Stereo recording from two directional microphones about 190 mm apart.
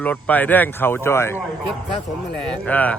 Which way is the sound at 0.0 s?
10° left (ahead or behind).